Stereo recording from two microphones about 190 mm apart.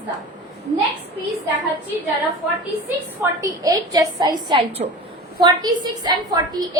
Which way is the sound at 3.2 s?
15° right (ahead or behind).